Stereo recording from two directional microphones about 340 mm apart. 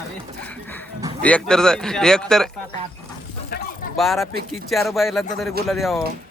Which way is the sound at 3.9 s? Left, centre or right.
Centre.